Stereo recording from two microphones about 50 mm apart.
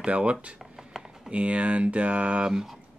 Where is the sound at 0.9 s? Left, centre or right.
Centre.